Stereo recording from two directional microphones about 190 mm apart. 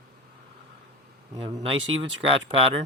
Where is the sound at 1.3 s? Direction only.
20° right (ahead or behind).